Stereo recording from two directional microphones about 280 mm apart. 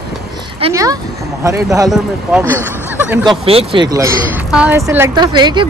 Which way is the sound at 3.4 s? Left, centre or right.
Right.